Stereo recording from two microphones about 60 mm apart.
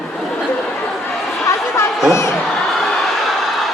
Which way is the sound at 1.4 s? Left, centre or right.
Left.